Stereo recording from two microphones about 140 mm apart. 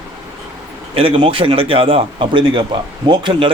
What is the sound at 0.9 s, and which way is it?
A man's voice, 40° right (ahead or behind).